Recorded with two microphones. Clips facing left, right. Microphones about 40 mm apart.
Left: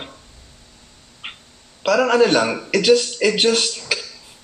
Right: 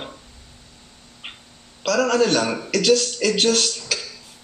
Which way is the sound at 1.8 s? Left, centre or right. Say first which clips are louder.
Left 4 dB; centre.